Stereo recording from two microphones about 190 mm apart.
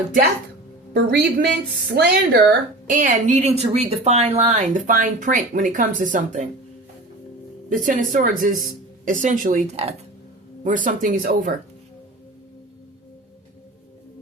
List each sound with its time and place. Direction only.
0.9 s speech: 60° right (ahead or behind)
2.9 s speech: 45° right (ahead or behind)
7.7 s speech: 45° right (ahead or behind)